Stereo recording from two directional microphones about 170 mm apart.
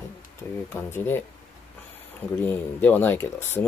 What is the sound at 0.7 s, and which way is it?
Speech, 15° left (ahead or behind).